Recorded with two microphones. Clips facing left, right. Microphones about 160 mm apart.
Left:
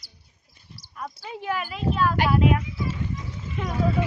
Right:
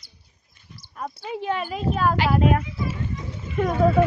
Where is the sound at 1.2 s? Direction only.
25° right (ahead or behind).